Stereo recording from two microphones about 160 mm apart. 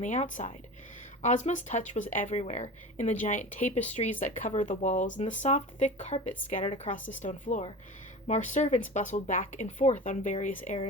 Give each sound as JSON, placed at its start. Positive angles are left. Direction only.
{"t": 0.0, "sound": "speech", "side_deg": 50}